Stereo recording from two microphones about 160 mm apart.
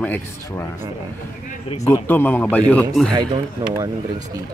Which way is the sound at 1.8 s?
15° left (ahead or behind).